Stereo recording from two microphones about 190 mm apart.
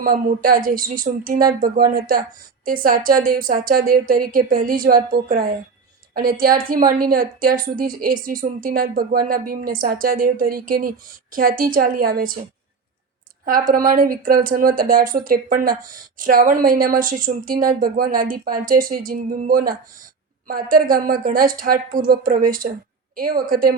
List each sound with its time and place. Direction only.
0.0 s a woman's voice: 50° right (ahead or behind)
13.4 s a woman's voice: 45° right (ahead or behind)